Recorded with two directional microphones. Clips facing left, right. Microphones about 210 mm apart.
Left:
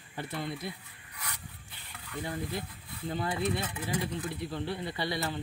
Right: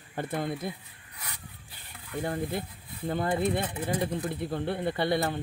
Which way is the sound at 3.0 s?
50° right (ahead or behind).